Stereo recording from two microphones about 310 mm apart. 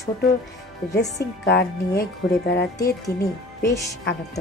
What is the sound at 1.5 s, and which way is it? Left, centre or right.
Speech, left.